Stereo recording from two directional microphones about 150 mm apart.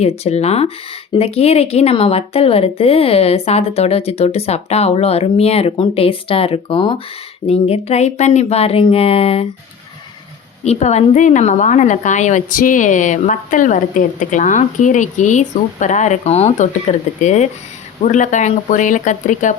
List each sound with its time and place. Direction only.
0.0 s a woman's voice: 45° left (ahead or behind)
10.6 s a woman's voice: 45° left (ahead or behind)